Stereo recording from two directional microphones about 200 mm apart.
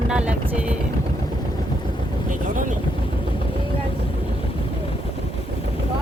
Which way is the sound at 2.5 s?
40° right (ahead or behind).